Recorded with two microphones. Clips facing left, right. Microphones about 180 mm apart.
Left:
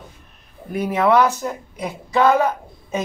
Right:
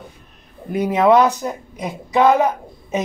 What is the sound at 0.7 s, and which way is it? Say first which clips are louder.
Speech: right 3 dB; 20° right (ahead or behind).